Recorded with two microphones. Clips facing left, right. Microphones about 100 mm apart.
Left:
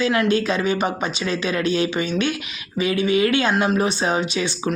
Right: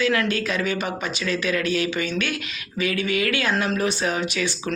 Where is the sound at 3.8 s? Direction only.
25° left (ahead or behind).